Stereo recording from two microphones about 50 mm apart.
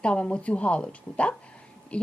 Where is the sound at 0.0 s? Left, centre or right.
Left.